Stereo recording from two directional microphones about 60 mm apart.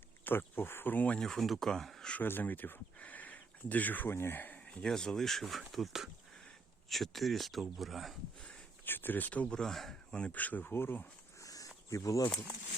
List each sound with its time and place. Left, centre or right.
0.3 s speech: left
1.2 s speech: centre
2.2 s speech: left
4.6 s a sound: centre
4.9 s speech: centre
8.8 s speech: left
9.5 s speech: centre
10.2 s speech: left
11.3 s a sound: left
11.9 s speech: left